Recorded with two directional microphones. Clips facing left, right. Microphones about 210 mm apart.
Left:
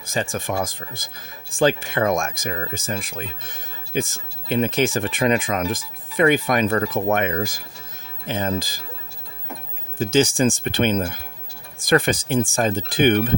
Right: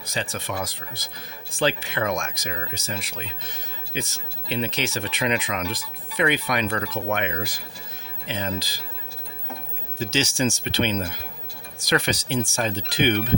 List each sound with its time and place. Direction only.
0.0 s speech: 50° left (ahead or behind)
10.0 s speech: 50° left (ahead or behind)